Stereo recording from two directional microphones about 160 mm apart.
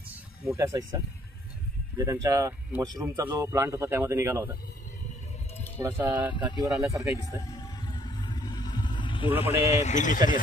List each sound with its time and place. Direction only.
0.6 s speech: 20° right (ahead or behind)
5.8 s speech: 15° right (ahead or behind)
7.3 s vehicle: 25° left (ahead or behind)
9.4 s a man's voice: 40° left (ahead or behind); by 10.4 s 55° left (ahead or behind)